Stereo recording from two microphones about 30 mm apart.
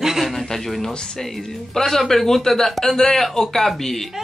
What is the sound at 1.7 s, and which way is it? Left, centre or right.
A man's voice, centre.